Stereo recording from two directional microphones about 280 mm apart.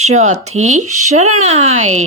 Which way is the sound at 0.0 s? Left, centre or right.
Right.